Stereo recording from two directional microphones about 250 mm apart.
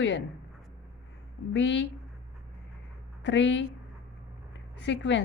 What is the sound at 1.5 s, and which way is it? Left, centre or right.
Speech, left.